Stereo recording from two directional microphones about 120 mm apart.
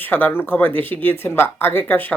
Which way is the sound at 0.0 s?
15° left (ahead or behind).